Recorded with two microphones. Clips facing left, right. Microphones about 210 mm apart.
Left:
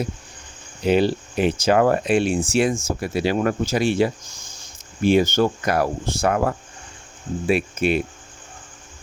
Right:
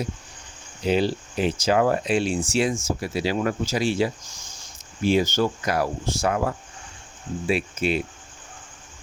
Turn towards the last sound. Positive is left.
turn(degrees=55)  # may be behind; listen again after turning